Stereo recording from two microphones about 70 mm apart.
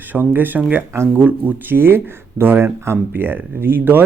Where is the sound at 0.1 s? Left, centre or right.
Right.